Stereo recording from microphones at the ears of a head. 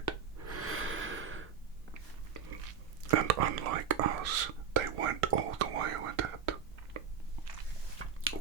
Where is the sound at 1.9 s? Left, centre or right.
Right.